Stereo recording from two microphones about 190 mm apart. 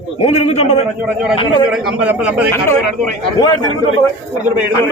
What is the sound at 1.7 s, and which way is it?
Speech, 5° right (ahead or behind).